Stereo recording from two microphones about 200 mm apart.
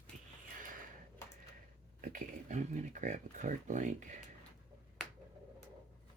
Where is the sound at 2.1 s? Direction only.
35° right (ahead or behind).